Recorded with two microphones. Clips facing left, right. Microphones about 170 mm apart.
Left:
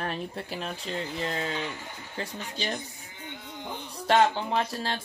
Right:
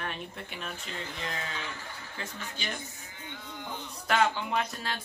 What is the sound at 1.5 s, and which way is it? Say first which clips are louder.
Speech: left 6 dB; 20° left (ahead or behind).